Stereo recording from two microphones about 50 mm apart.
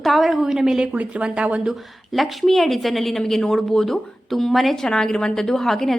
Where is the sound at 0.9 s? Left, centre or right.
Right.